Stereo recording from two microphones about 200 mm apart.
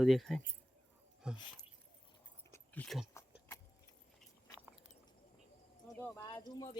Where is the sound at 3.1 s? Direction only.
15° left (ahead or behind).